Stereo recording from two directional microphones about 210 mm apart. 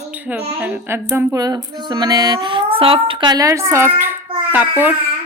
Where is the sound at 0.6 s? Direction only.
10° right (ahead or behind).